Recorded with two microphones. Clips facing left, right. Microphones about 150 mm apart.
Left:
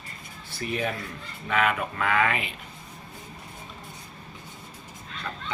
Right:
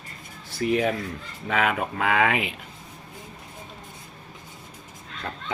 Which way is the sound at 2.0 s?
90° right.